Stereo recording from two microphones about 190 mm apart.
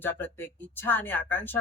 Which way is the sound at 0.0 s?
10° left (ahead or behind).